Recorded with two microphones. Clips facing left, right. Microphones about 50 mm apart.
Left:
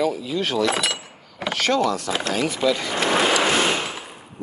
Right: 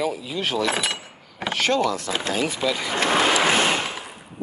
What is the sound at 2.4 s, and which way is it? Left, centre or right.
Speech, centre.